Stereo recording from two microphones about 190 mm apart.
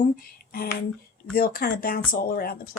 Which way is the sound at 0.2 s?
50° left (ahead or behind).